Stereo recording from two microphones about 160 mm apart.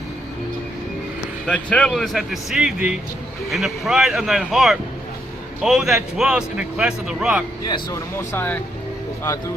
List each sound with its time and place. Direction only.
1.5 s a man's voice: 5° left (ahead or behind)
7.7 s speech: 20° left (ahead or behind)